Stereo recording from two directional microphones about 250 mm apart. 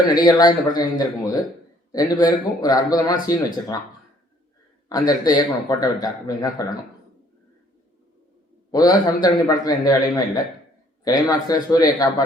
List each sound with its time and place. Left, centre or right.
0.0 s speech: centre
4.9 s speech: centre
8.7 s speech: centre